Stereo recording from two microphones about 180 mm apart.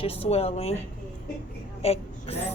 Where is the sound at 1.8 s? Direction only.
35° left (ahead or behind).